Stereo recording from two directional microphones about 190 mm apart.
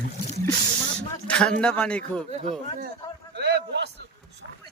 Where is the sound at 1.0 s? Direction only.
5° left (ahead or behind).